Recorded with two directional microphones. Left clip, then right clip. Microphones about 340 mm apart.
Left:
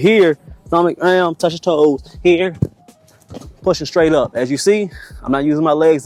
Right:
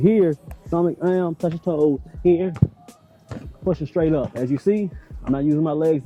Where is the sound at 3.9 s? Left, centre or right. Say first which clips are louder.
Left 8 dB; centre.